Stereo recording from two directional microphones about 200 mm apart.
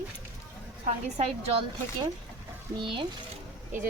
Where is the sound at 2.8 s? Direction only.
25° right (ahead or behind).